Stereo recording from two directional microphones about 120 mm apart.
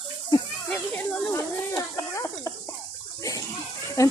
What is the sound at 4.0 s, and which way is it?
Speech, 30° left (ahead or behind).